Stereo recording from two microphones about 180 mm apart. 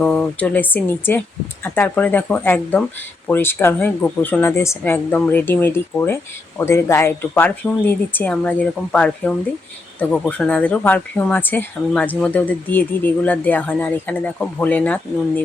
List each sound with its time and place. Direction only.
0.0 s speech: 5° left (ahead or behind)